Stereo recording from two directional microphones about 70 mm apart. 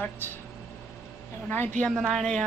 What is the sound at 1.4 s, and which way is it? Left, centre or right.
Speech, left.